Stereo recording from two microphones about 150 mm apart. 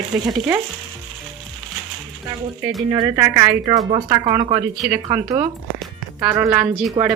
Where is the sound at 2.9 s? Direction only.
25° right (ahead or behind).